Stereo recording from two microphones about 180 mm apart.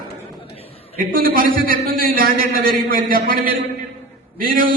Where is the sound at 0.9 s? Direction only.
55° right (ahead or behind).